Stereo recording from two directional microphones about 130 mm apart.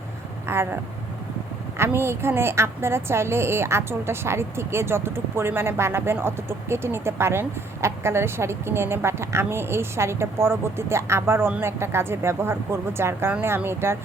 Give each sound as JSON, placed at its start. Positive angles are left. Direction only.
{"t": 0.4, "sound": "a woman's voice", "side_deg": -20}
{"t": 1.8, "sound": "a woman's voice", "side_deg": -20}